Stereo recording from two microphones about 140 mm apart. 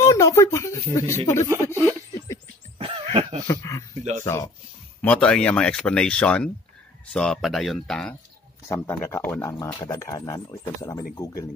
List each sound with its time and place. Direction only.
0.0 s speech: 20° left (ahead or behind)
2.8 s a sound: 45° right (ahead or behind)
3.4 s speech: 25° left (ahead or behind)
5.0 s speech: 10° left (ahead or behind)
8.6 s speech: 15° left (ahead or behind)